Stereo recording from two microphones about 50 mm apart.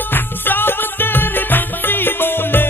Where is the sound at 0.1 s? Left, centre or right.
Left.